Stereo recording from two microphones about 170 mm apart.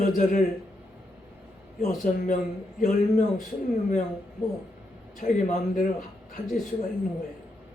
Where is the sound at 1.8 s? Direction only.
50° left (ahead or behind).